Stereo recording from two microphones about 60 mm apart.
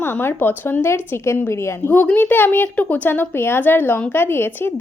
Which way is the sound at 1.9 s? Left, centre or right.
Left.